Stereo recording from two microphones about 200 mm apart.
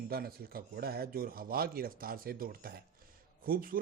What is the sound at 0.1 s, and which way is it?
A man's voice, 50° right (ahead or behind).